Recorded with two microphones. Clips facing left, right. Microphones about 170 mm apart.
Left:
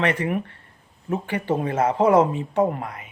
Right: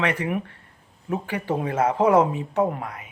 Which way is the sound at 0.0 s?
10° right (ahead or behind).